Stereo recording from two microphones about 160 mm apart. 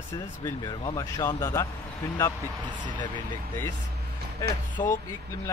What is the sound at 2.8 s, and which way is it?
Speech, 30° left (ahead or behind).